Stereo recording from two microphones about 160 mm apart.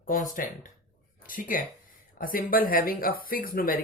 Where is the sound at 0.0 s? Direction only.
60° left (ahead or behind).